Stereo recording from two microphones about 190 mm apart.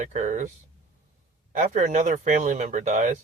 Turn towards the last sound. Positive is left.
turn(degrees=-40)  # may be behind; listen again after turning